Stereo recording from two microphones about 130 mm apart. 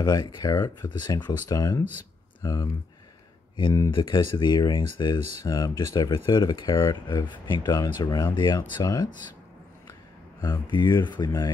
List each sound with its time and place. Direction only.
0.0 s speech: 30° left (ahead or behind)
3.9 s speech: 35° left (ahead or behind)
10.4 s speech: 35° left (ahead or behind)